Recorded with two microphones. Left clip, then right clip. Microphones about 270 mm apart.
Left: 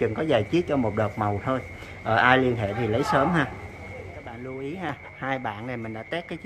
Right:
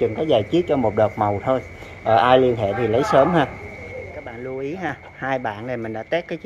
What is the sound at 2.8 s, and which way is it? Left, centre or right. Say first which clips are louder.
Speech: right 7 dB; centre.